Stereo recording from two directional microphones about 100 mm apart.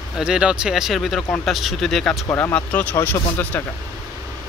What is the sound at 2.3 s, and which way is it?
Speech, 20° left (ahead or behind).